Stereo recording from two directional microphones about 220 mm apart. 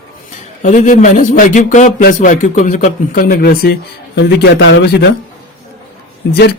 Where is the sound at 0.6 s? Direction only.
35° left (ahead or behind).